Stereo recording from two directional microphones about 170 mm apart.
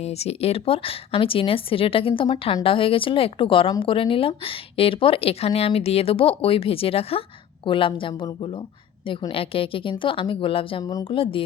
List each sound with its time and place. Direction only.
0.0 s speech: 40° left (ahead or behind)